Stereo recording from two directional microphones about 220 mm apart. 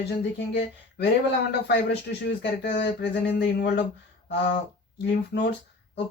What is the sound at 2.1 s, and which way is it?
Speech, 45° left (ahead or behind).